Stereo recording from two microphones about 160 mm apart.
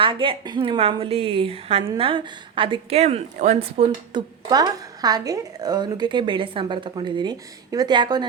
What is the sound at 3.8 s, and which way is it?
Speech, 25° right (ahead or behind).